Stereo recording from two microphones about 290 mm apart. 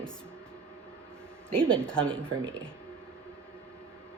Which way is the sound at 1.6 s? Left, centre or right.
Centre.